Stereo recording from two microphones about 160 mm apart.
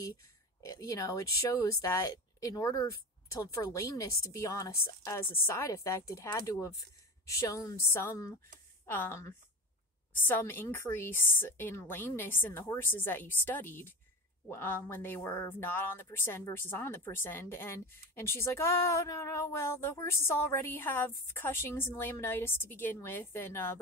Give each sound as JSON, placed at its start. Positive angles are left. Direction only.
{"t": 0.7, "sound": "speech", "side_deg": 20}